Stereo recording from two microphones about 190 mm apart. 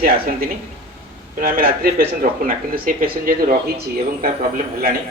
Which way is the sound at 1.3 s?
50° right (ahead or behind).